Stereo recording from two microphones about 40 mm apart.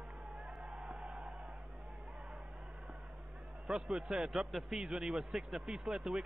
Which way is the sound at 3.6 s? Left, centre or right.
Centre.